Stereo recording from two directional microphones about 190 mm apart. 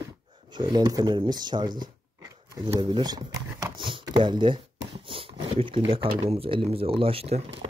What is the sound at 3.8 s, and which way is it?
Typing, 25° right (ahead or behind).